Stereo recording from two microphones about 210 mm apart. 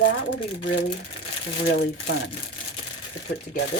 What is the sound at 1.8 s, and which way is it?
Speech, 55° left (ahead or behind).